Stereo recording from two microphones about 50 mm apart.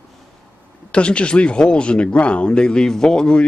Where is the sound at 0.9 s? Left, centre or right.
Left.